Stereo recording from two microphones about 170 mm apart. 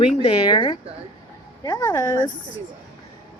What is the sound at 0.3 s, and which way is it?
A woman's voice, 25° left (ahead or behind).